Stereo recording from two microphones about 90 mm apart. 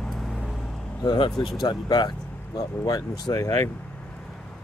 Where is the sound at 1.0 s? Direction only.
60° left (ahead or behind).